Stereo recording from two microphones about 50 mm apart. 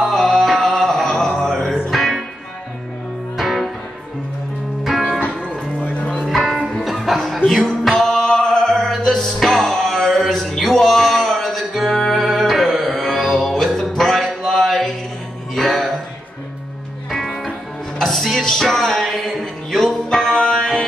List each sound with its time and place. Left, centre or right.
0.0 s a sound: centre
1.7 s music: centre
3.3 s music: centre
5.8 s music: centre
6.1 s music: centre
7.4 s music: centre
17.1 s music: centre